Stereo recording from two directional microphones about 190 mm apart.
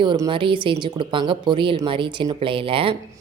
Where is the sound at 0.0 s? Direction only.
25° right (ahead or behind).